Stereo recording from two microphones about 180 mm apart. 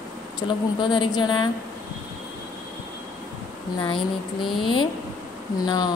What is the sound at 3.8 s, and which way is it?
Speech, 25° left (ahead or behind).